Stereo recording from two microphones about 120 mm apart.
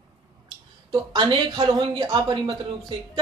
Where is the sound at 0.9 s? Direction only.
40° right (ahead or behind).